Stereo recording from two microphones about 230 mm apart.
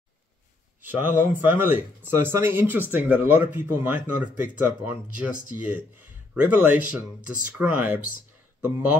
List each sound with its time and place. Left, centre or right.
0.8 s speech: centre
6.3 s speech: centre